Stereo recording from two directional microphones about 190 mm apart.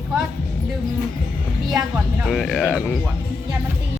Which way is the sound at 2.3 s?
Centre (ahead or behind).